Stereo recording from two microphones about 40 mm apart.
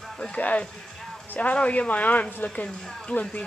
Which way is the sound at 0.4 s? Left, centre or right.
Left.